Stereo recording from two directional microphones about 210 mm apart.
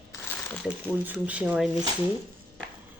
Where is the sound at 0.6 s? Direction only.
5° right (ahead or behind).